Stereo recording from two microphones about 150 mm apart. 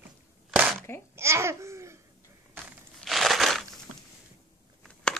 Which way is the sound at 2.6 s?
Centre (ahead or behind).